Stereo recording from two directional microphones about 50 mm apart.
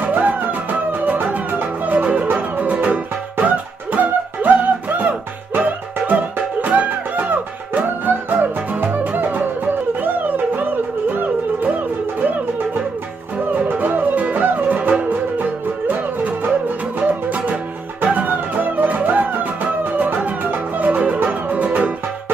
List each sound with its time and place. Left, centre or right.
0.0 s music: right
13.5 s music: right